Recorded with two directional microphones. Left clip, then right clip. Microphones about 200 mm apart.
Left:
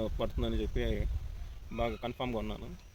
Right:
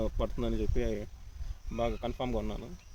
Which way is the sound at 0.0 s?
20° right (ahead or behind).